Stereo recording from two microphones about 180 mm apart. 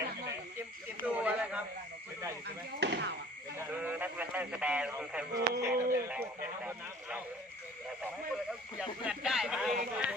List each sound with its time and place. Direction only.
1.0 s speech: 5° right (ahead or behind)
2.8 s speech: 70° right (ahead or behind)
3.6 s speech: 10° right (ahead or behind)
5.3 s speech: 15° right (ahead or behind)
8.8 s speech: 5° right (ahead or behind)